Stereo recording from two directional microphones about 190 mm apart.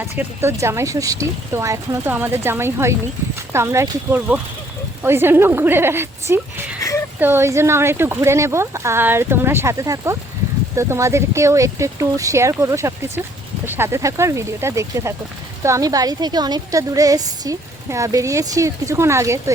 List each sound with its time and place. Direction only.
0.2 s a woman's voice: 15° right (ahead or behind)